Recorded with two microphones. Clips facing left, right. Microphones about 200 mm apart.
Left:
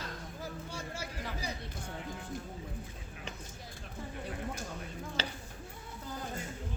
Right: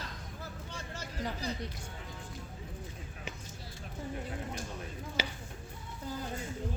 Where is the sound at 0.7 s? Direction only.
10° left (ahead or behind).